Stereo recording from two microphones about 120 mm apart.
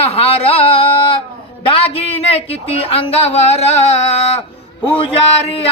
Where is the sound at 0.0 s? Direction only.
55° left (ahead or behind).